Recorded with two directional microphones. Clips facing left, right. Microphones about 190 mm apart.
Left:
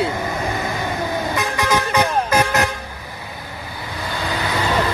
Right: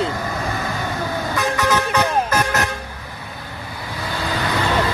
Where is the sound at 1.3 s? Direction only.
10° left (ahead or behind).